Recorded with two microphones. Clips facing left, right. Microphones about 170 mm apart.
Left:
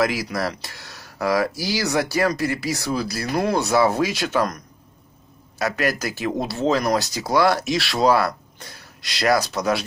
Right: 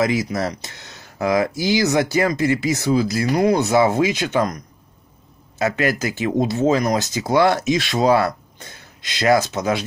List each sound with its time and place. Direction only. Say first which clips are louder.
0.0 s speech: right 2 dB; 20° right (ahead or behind)
5.6 s speech: right 3 dB; 20° right (ahead or behind)